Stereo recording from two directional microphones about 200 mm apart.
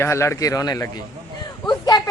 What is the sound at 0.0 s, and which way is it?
A woman's voice, 15° left (ahead or behind).